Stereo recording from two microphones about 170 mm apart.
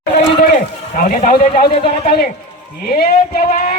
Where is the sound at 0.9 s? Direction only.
50° left (ahead or behind).